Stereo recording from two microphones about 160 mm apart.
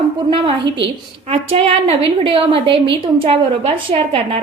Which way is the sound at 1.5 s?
35° right (ahead or behind).